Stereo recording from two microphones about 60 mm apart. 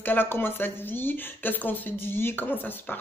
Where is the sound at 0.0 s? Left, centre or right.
Left.